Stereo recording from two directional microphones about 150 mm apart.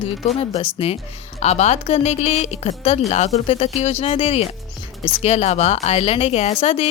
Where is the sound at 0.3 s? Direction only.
40° left (ahead or behind).